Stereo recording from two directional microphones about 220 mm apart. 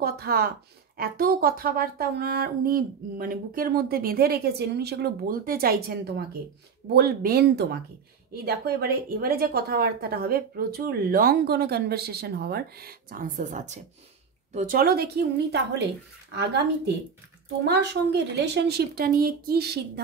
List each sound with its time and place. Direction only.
0.0 s speech: 45° right (ahead or behind)